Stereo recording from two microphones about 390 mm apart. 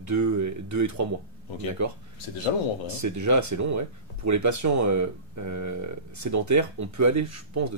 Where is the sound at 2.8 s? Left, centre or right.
Right.